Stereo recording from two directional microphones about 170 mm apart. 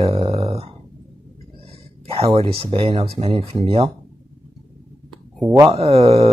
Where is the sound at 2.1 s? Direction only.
35° right (ahead or behind).